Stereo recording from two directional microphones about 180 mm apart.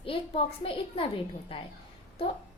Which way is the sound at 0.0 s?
30° left (ahead or behind).